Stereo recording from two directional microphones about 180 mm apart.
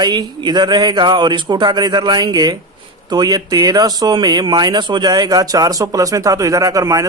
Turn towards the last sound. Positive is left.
turn(degrees=-20)  # may be behind; listen again after turning